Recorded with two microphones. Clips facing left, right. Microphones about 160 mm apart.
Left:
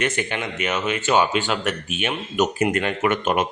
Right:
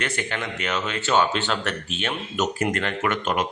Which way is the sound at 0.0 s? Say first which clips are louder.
Left 4 dB; 15° left (ahead or behind).